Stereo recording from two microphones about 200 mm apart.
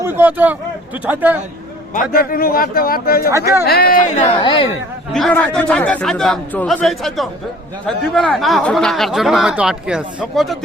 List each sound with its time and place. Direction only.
0.0 s a sound: 10° right (ahead or behind)
1.0 s a man's voice: 10° right (ahead or behind)
1.9 s speech: 45° left (ahead or behind); by 4.7 s 25° left (ahead or behind)
5.1 s speech: 5° left (ahead or behind)